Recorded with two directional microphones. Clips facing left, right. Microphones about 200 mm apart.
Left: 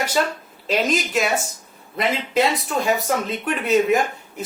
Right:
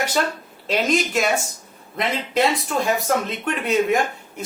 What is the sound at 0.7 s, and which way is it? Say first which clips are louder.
Speech: even; centre (ahead or behind).